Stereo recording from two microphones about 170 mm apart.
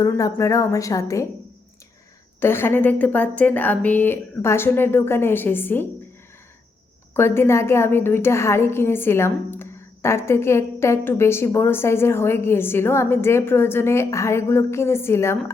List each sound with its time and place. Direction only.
0.0 s a woman's voice: 20° left (ahead or behind)
2.4 s a woman's voice: 15° left (ahead or behind)
7.1 s a woman's voice: 15° left (ahead or behind)